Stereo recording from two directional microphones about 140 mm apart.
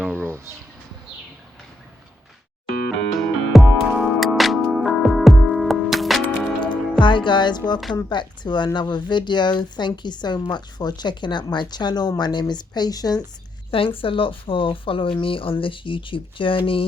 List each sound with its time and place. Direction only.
0.3 s speech: 20° right (ahead or behind)
3.1 s music: centre (ahead or behind)
7.0 s a woman's voice: 35° left (ahead or behind)
13.7 s a woman's voice: 40° left (ahead or behind)